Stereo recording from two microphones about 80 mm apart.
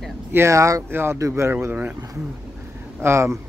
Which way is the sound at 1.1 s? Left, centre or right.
Right.